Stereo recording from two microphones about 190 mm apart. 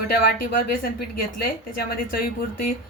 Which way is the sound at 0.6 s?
50° left (ahead or behind).